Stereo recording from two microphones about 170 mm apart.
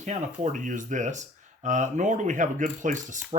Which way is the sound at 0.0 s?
45° right (ahead or behind).